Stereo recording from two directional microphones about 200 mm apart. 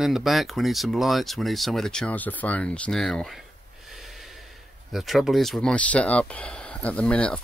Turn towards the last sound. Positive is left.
turn(degrees=5)  # may be behind; listen again after turning